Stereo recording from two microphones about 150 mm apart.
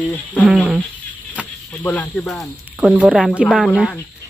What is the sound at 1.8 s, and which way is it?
Speech, 15° left (ahead or behind).